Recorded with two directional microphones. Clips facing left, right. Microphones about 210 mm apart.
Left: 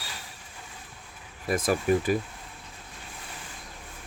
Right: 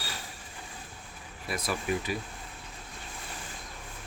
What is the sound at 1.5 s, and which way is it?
Speech, 45° left (ahead or behind).